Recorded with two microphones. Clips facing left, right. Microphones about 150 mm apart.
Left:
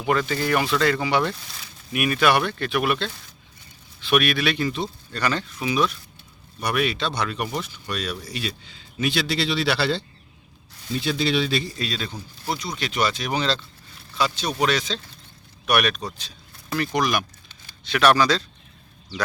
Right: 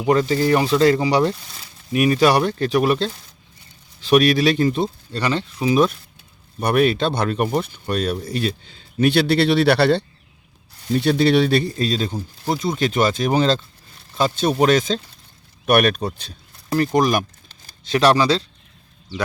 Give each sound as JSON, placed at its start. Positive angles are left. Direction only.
{"t": 0.1, "sound": "speech", "side_deg": -30}
{"t": 5.1, "sound": "speech", "side_deg": -25}
{"t": 6.6, "sound": "speech", "side_deg": -50}
{"t": 11.8, "sound": "speech", "side_deg": -40}
{"t": 17.7, "sound": "speech", "side_deg": -35}